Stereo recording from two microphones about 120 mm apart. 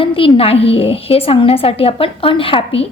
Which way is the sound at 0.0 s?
50° left (ahead or behind).